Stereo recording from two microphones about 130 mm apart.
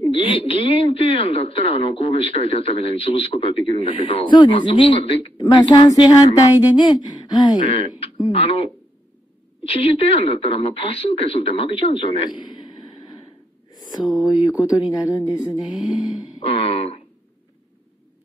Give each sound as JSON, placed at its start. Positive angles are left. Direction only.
{"t": 0.1, "sound": "speech", "side_deg": 45}
{"t": 5.4, "sound": "speech", "side_deg": 30}
{"t": 13.7, "sound": "a sound", "side_deg": 30}
{"t": 14.6, "sound": "speech", "side_deg": 30}
{"t": 16.3, "sound": "speech", "side_deg": 50}